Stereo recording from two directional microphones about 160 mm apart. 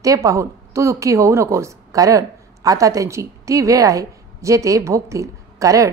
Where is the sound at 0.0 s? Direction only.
20° right (ahead or behind).